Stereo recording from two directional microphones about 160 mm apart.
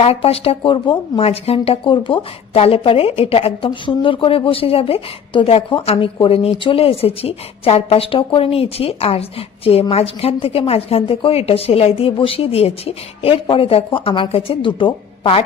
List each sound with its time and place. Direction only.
0.0 s speech: 35° left (ahead or behind)